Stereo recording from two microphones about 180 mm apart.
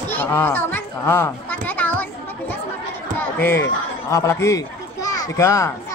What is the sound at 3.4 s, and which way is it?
A child's voice, 10° left (ahead or behind).